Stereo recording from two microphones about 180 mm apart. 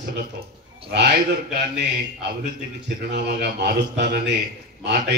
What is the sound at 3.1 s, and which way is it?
A man's voice, 65° right (ahead or behind).